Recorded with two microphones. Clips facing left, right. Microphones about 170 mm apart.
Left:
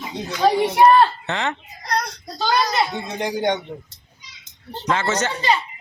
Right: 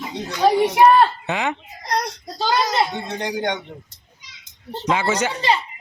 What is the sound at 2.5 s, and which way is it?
Speech, 25° right (ahead or behind).